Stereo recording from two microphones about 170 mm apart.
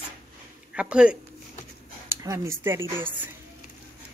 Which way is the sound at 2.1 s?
20° right (ahead or behind).